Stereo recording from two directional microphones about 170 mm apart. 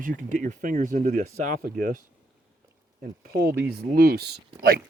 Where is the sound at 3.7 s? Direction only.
65° right (ahead or behind).